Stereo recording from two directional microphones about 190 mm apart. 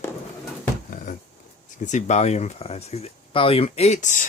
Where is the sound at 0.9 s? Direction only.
45° left (ahead or behind).